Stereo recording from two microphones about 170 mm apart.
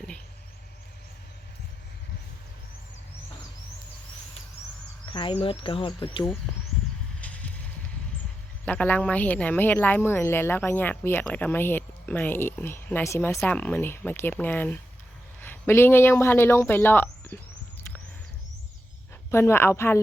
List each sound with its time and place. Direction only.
5.0 s speech: 30° left (ahead or behind)
7.2 s clip-clop: 10° left (ahead or behind)
8.6 s speech: 10° left (ahead or behind)
19.3 s speech: 15° left (ahead or behind)